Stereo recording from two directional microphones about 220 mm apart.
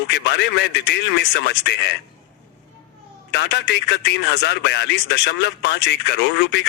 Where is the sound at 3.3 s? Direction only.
50° left (ahead or behind).